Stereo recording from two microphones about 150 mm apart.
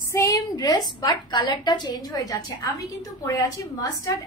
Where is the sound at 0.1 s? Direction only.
25° left (ahead or behind).